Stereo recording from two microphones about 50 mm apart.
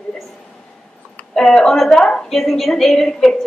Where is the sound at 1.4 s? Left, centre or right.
Centre.